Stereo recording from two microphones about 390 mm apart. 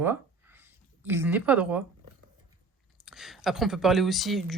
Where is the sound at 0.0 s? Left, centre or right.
Centre.